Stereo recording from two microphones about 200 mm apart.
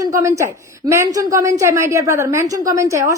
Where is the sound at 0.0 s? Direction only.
15° right (ahead or behind).